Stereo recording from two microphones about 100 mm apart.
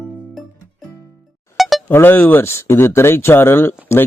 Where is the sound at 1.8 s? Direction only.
20° left (ahead or behind).